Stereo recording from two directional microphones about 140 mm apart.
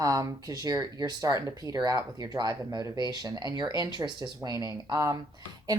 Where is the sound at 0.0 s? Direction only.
25° right (ahead or behind).